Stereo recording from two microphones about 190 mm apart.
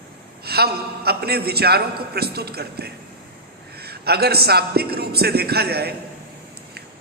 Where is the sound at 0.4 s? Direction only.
55° right (ahead or behind).